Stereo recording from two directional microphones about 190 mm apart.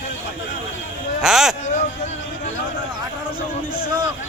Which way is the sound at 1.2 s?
Centre (ahead or behind).